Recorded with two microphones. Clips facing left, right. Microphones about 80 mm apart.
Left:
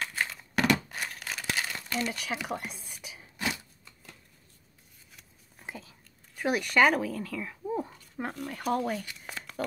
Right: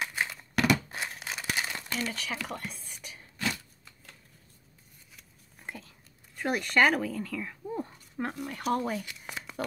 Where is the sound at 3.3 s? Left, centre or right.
Centre.